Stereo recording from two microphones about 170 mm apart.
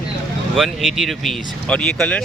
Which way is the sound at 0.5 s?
Centre (ahead or behind).